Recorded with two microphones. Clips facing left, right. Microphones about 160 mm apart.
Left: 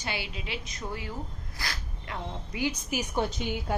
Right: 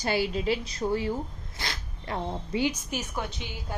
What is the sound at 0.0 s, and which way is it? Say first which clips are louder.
A woman's voice: right 9 dB; 40° right (ahead or behind).